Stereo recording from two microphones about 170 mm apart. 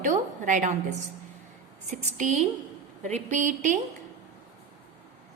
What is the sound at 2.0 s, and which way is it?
A woman's voice, 45° right (ahead or behind).